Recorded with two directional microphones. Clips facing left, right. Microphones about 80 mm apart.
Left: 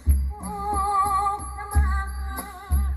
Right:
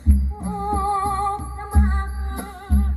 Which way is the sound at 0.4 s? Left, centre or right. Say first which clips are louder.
Right 2 dB; left.